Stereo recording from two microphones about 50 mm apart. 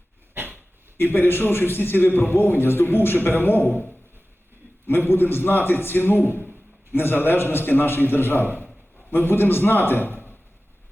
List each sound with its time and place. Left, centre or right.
0.3 s a sound: right
0.9 s a man's voice: left
4.9 s a man's voice: left